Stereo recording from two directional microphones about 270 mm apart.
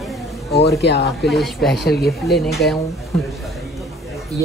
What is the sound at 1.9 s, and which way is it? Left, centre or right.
Speech, left.